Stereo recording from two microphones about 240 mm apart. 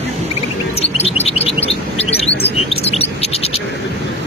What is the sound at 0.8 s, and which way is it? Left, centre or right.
Chirp, left.